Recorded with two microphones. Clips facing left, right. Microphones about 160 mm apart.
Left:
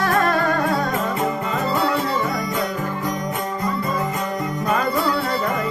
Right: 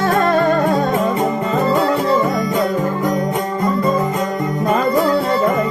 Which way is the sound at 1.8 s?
45° right (ahead or behind).